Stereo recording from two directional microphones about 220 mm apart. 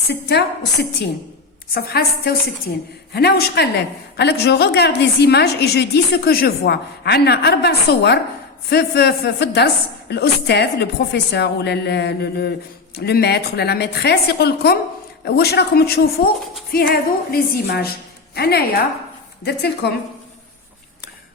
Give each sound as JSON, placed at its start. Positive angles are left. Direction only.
{"t": 0.1, "sound": "a woman's voice", "side_deg": 50}